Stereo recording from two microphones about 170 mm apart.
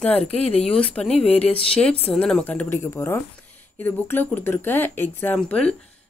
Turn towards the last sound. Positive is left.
turn(degrees=5)  # may be behind; listen again after turning